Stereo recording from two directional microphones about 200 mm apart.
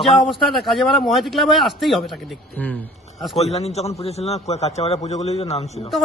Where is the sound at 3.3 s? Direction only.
30° left (ahead or behind).